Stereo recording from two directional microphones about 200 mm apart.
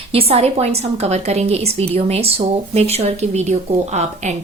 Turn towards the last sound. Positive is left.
turn(degrees=-35)  # may be behind; listen again after turning